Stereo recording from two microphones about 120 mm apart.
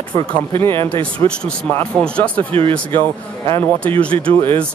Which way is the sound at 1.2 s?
30° left (ahead or behind).